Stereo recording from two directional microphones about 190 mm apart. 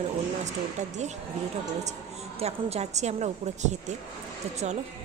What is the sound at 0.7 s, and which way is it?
A woman's voice, 40° right (ahead or behind).